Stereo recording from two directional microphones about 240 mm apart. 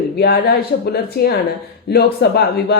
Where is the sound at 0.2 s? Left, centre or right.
Left.